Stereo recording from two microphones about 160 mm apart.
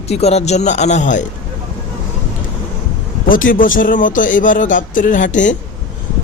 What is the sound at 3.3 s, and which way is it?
A man's voice, 60° left (ahead or behind).